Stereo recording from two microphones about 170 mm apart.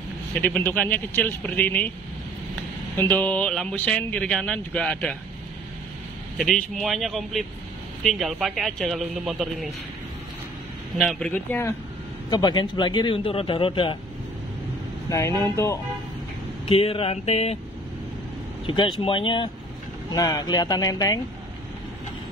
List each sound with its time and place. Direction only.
0.3 s speech: 10° left (ahead or behind)
3.0 s speech: 10° left (ahead or behind)
6.3 s speech: centre (ahead or behind)
11.0 s speech: 5° left (ahead or behind)
12.3 s speech: 25° left (ahead or behind)
15.0 s speech: 20° left (ahead or behind)
16.6 s speech: 35° left (ahead or behind)
18.7 s speech: 30° left (ahead or behind)